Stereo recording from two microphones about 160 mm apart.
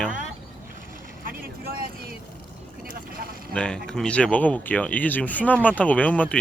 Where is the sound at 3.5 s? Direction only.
5° left (ahead or behind).